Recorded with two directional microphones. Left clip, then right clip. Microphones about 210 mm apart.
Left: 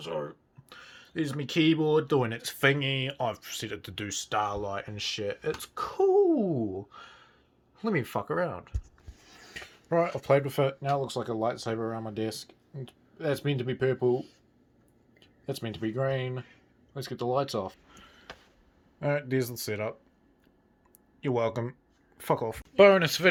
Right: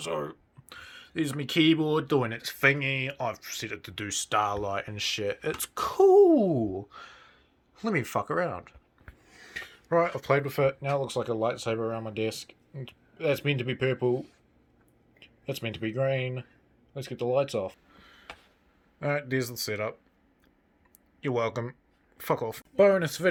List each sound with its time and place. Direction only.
0.0 s speech: 25° right (ahead or behind)
0.7 s speech: 10° right (ahead or behind)
2.2 s speech: 10° left (ahead or behind)
4.0 s speech: 10° right (ahead or behind)
9.2 s speech: centre (ahead or behind)
15.2 s speech: 5° right (ahead or behind)
18.9 s speech: centre (ahead or behind)
21.2 s speech: centre (ahead or behind)